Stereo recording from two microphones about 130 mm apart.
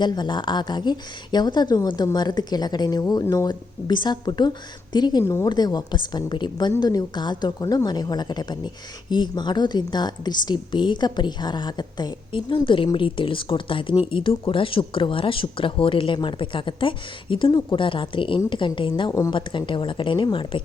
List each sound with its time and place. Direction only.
0.0 s a woman's voice: 35° left (ahead or behind)
5.2 s a woman's voice: 20° left (ahead or behind)
5.5 s a woman's voice: 30° left (ahead or behind)